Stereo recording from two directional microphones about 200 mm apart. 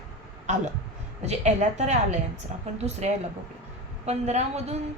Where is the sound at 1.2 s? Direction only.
35° right (ahead or behind).